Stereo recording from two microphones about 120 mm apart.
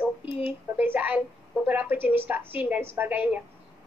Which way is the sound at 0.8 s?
15° right (ahead or behind).